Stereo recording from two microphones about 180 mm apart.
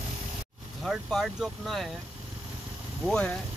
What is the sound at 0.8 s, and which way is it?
Speech, centre (ahead or behind).